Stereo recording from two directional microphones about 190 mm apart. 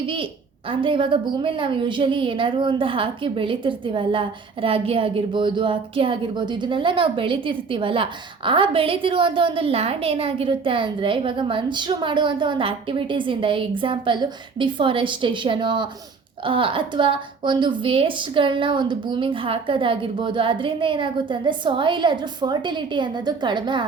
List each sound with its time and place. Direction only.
0.0 s a woman's voice: 25° right (ahead or behind)